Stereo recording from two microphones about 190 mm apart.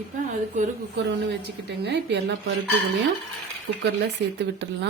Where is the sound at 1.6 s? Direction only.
60° right (ahead or behind).